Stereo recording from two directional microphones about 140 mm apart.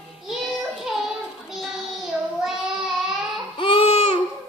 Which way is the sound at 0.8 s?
5° right (ahead or behind).